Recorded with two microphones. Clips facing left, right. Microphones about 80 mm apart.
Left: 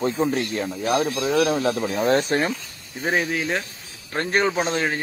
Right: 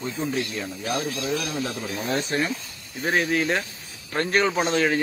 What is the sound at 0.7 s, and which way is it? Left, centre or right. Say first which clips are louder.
Speech: left 6 dB; left.